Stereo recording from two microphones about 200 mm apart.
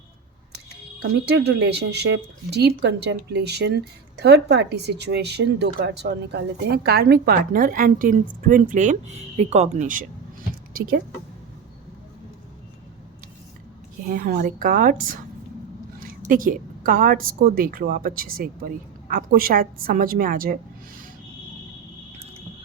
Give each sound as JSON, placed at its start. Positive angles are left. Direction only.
{"t": 1.2, "sound": "a woman's voice", "side_deg": -55}
{"t": 14.1, "sound": "a woman's voice", "side_deg": -45}